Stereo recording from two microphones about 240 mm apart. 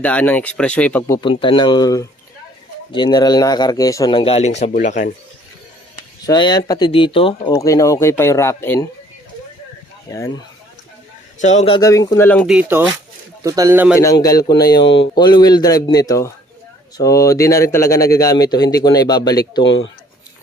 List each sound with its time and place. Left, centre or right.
0.0 s speech: centre; by 5.1 s left
6.2 s speech: centre
10.1 s speech: centre
11.3 s speech: left; by 12.5 s centre
12.5 s speech: centre
14.0 s speech: centre
14.8 s speech: left
15.1 s speech: centre
19.6 s speech: left